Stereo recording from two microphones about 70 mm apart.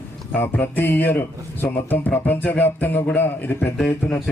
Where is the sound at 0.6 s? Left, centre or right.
Left.